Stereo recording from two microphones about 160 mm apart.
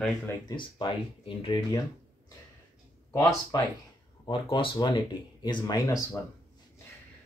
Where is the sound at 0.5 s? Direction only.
30° left (ahead or behind).